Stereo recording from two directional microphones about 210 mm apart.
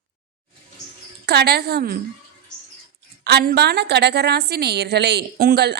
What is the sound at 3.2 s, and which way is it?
A woman's voice, 50° right (ahead or behind).